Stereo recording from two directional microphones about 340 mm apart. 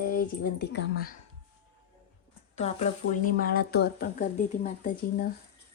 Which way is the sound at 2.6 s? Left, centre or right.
Centre.